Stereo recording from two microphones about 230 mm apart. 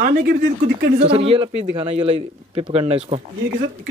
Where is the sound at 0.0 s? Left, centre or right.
Right.